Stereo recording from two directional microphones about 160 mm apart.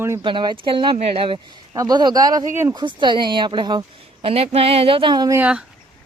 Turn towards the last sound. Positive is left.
turn(degrees=-5)  # may be behind; listen again after turning